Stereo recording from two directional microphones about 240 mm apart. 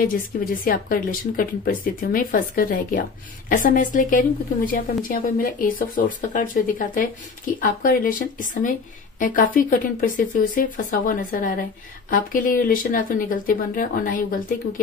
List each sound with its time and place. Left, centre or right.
0.7 s speech: left